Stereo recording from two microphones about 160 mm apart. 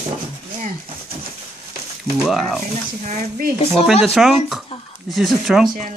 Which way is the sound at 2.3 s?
Centre (ahead or behind).